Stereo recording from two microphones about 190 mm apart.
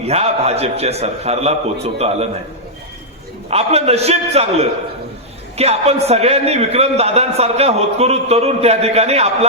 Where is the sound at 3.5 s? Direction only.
35° right (ahead or behind).